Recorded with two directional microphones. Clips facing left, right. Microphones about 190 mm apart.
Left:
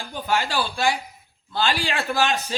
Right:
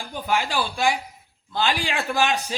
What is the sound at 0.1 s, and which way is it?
A man's voice, 15° right (ahead or behind).